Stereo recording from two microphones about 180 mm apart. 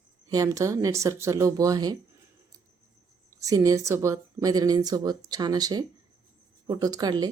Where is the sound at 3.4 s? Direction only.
20° right (ahead or behind).